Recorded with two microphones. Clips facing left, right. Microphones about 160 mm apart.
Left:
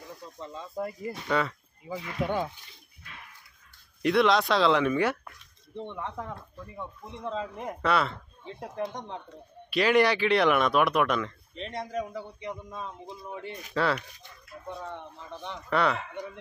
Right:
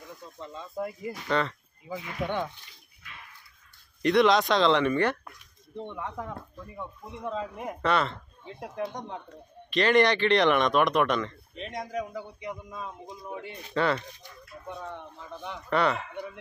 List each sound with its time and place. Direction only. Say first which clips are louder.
0.4 s speech: even; centre (ahead or behind)
4.0 s speech: right 1 dB; centre (ahead or behind)
5.8 s speech: even; 5° right (ahead or behind)
7.8 s speech: even; 5° left (ahead or behind)
9.7 s speech: right 1 dB; 5° left (ahead or behind)
13.3 s speech: even; 10° right (ahead or behind)
13.7 s speech: right 1 dB; centre (ahead or behind)
15.4 s speech: right 1 dB; centre (ahead or behind)